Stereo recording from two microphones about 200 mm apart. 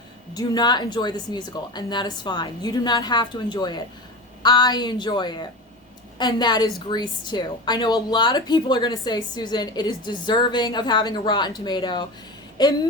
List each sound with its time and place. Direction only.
0.3 s a woman's voice: 20° left (ahead or behind)